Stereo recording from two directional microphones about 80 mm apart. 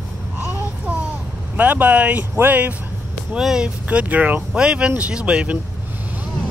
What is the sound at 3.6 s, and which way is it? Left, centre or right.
Speech, centre.